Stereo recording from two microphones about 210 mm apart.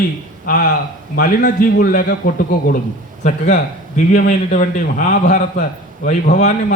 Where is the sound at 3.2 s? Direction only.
35° left (ahead or behind).